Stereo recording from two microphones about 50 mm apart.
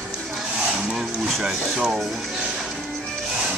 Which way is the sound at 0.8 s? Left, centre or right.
Centre.